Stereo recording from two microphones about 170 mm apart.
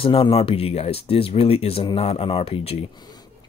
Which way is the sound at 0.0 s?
35° left (ahead or behind).